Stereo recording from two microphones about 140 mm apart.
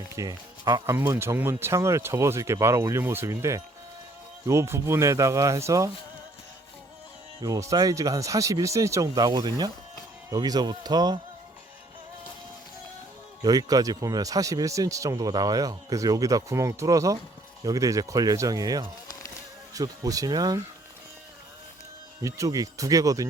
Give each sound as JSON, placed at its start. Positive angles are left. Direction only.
{"t": 0.2, "sound": "speech", "side_deg": -25}
{"t": 7.4, "sound": "speech", "side_deg": -25}
{"t": 13.4, "sound": "speech", "side_deg": -30}
{"t": 22.2, "sound": "speech", "side_deg": -25}